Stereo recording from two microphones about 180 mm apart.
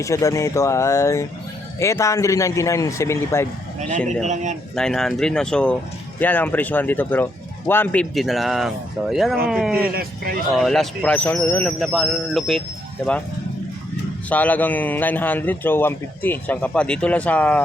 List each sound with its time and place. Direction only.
0.0 s a man's voice: 15° left (ahead or behind)
4.7 s a man's voice: 5° left (ahead or behind)
8.1 s speech: centre (ahead or behind)
9.9 s speech: 55° right (ahead or behind)
10.5 s a man's voice: centre (ahead or behind)
11.8 s speech: centre (ahead or behind)
14.3 s a man's voice: 10° left (ahead or behind)